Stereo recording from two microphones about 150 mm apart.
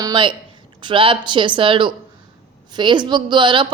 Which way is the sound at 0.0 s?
30° right (ahead or behind).